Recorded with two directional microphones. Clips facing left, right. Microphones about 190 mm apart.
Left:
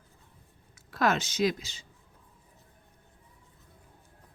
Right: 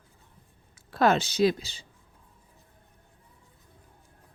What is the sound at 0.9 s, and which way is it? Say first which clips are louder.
Speech: right 4 dB; 30° right (ahead or behind).